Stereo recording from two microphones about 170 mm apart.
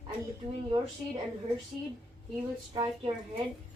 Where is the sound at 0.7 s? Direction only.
25° right (ahead or behind).